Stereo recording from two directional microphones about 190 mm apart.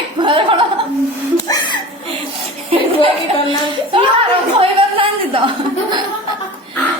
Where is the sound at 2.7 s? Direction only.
30° right (ahead or behind).